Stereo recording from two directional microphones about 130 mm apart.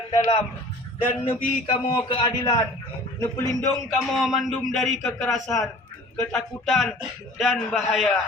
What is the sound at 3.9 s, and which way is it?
A man's voice, centre (ahead or behind).